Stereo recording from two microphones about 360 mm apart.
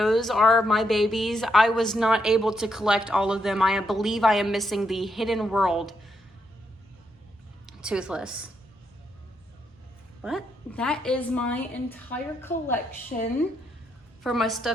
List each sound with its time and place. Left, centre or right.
0.0 s a woman's voice: centre
7.7 s a woman's voice: centre
10.2 s a woman's voice: centre
13.1 s a woman's voice: centre
14.3 s a woman's voice: centre